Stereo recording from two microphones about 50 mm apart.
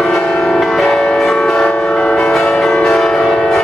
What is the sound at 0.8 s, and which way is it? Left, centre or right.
Church bell, centre.